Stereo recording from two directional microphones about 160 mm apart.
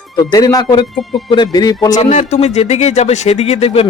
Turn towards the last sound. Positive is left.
turn(degrees=35)  # may be behind; listen again after turning